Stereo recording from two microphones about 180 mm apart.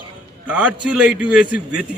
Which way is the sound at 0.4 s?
5° right (ahead or behind).